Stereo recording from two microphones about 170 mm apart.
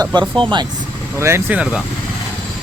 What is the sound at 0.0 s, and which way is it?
Speech, 25° right (ahead or behind).